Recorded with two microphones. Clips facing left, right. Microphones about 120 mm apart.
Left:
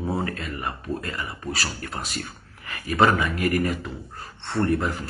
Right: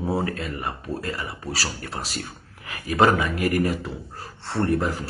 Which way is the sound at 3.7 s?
Centre (ahead or behind).